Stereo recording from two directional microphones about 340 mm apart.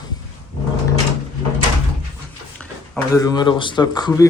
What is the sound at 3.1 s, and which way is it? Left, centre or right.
A man's voice, centre.